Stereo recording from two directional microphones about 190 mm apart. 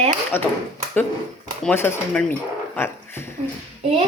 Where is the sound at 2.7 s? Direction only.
10° left (ahead or behind).